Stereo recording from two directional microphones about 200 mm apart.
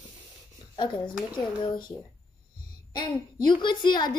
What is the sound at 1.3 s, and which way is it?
Speech, 25° left (ahead or behind).